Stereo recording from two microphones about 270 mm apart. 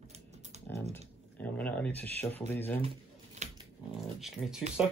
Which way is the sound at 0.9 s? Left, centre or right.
Centre.